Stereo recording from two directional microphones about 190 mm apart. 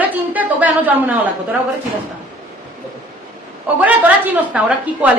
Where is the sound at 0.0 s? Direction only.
10° right (ahead or behind).